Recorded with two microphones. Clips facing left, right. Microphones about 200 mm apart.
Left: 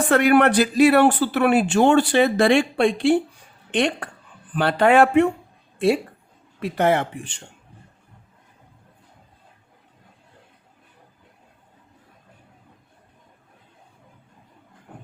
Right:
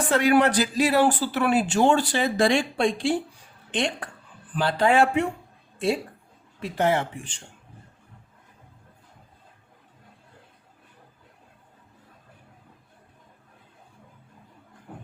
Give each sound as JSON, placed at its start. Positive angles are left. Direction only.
{"t": 0.1, "sound": "speech", "side_deg": 60}
{"t": 6.6, "sound": "speech", "side_deg": 60}